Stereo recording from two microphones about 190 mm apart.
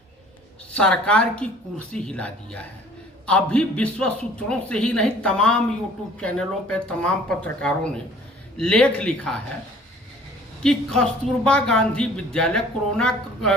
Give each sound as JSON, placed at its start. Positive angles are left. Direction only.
{"t": 0.7, "sound": "a man's voice", "side_deg": 5}
{"t": 10.6, "sound": "speech", "side_deg": 5}